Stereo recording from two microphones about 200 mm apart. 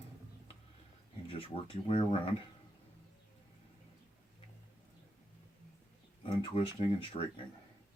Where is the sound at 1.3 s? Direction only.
25° left (ahead or behind).